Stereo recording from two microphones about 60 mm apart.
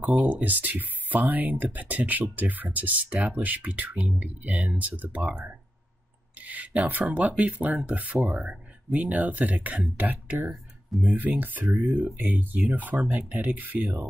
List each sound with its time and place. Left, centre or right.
0.0 s speech: right
5.2 s speech: centre